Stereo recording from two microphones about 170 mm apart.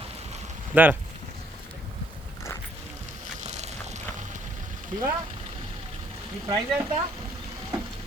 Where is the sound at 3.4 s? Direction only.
45° right (ahead or behind).